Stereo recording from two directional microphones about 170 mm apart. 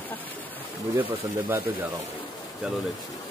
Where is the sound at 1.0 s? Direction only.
10° right (ahead or behind).